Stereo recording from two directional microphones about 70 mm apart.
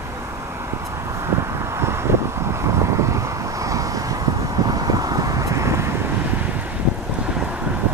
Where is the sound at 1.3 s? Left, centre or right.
Right.